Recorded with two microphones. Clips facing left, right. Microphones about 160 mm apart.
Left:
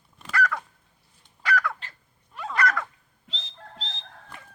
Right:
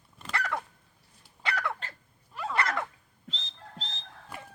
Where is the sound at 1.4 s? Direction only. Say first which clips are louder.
Left 6 dB; 25° right (ahead or behind).